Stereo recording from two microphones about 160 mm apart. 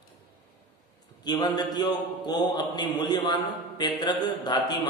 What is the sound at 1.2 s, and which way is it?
A man's voice, 25° left (ahead or behind).